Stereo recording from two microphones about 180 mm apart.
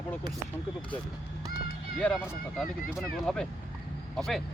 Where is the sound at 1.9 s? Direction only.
Centre (ahead or behind).